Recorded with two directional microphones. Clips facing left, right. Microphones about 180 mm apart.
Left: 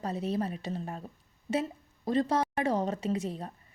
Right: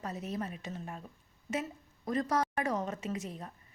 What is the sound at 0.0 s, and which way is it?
A woman's voice, 30° left (ahead or behind).